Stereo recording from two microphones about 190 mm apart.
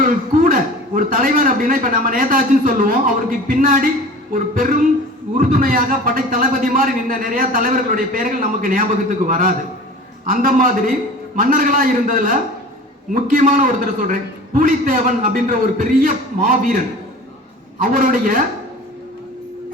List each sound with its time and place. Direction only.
0.0 s a man's voice: 45° right (ahead or behind)
17.8 s a man's voice: 45° right (ahead or behind)